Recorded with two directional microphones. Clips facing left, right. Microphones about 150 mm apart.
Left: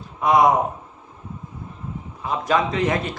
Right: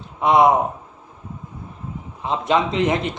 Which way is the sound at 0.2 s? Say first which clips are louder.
Right 2 dB; 25° right (ahead or behind).